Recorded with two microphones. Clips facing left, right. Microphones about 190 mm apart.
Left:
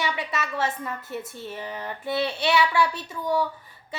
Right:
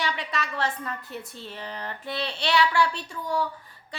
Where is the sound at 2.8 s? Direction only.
20° left (ahead or behind).